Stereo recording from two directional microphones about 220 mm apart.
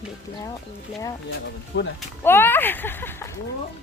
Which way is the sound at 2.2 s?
10° left (ahead or behind).